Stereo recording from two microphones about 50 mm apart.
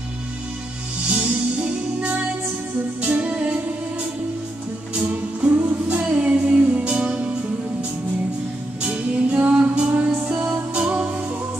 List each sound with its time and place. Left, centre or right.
1.0 s music: right
5.1 s music: right; by 7.2 s centre
8.8 s music: right